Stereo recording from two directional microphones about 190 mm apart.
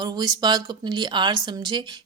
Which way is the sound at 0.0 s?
20° right (ahead or behind).